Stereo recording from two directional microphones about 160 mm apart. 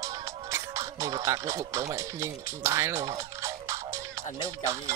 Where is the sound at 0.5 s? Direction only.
20° right (ahead or behind).